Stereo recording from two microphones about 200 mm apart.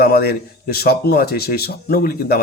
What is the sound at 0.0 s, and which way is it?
A man's voice, 50° left (ahead or behind).